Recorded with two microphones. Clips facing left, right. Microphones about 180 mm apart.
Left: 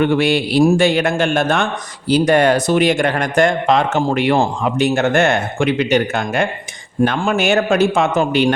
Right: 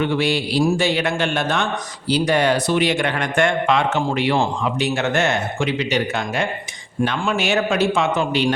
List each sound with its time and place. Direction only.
0.0 s speech: 55° left (ahead or behind); by 4.0 s 40° left (ahead or behind)
4.1 s speech: 55° left (ahead or behind)